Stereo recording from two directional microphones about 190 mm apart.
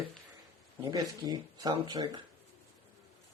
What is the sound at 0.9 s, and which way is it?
Speech, 20° right (ahead or behind).